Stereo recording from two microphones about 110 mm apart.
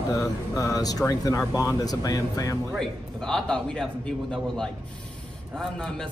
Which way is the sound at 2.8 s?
5° left (ahead or behind).